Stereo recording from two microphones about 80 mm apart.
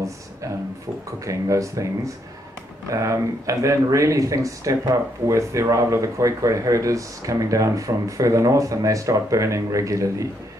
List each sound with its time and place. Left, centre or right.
1.2 s speech: right
2.9 s speech: right